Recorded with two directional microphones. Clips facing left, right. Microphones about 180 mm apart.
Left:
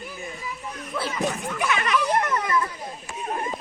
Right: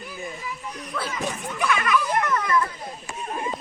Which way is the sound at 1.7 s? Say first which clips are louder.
Even; 25° left (ahead or behind).